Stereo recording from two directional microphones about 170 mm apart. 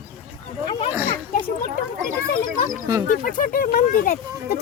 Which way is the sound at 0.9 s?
15° right (ahead or behind).